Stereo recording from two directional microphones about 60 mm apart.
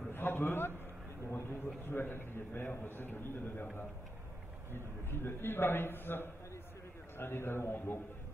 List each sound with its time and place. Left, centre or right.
0.1 s a man's voice: left
4.7 s a man's voice: left